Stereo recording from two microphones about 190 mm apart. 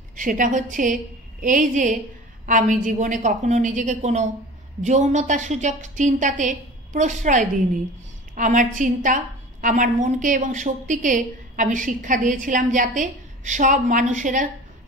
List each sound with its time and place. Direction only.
0.2 s a woman's voice: 45° right (ahead or behind)